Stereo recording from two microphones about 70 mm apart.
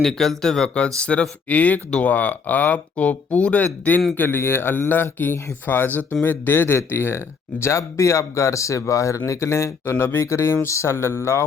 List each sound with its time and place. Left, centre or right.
0.0 s speech: centre; by 9.9 s left
9.9 s speech: left